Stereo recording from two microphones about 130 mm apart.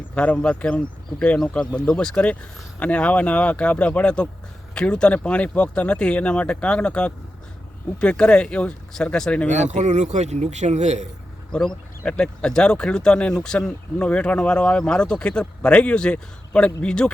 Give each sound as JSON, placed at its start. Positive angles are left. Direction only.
{"t": 0.1, "sound": "speech", "side_deg": 10}
{"t": 9.5, "sound": "a man's voice", "side_deg": -65}
{"t": 11.5, "sound": "speech", "side_deg": 5}